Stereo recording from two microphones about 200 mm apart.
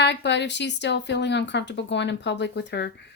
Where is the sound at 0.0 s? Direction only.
60° left (ahead or behind).